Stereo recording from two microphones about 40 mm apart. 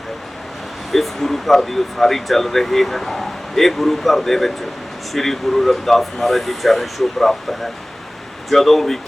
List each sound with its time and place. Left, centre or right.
0.9 s speech: centre
8.4 s speech: centre